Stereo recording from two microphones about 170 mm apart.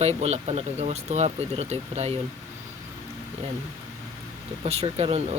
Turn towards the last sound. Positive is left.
turn(degrees=-35)  # may be behind; listen again after turning